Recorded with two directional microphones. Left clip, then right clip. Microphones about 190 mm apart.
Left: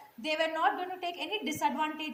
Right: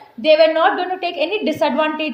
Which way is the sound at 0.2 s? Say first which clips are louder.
Right 18 dB; 45° right (ahead or behind).